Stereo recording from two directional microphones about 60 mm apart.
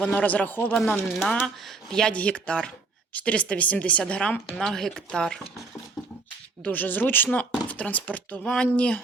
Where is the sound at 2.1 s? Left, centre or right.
Left.